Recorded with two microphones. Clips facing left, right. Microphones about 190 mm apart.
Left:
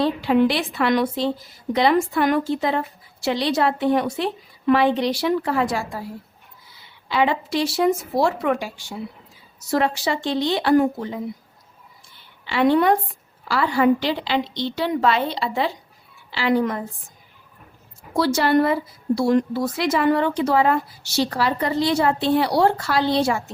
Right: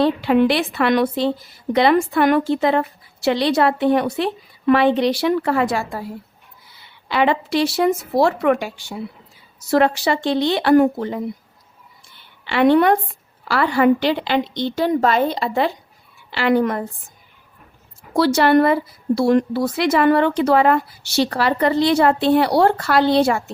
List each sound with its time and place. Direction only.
0.0 s a woman's voice: 65° right (ahead or behind)
7.1 s a woman's voice: 65° right (ahead or behind)
12.5 s a woman's voice: 65° right (ahead or behind)
18.2 s a woman's voice: 70° right (ahead or behind)